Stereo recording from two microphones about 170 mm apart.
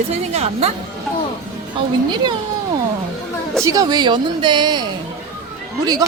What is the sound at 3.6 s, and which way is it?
A woman's voice, 20° right (ahead or behind).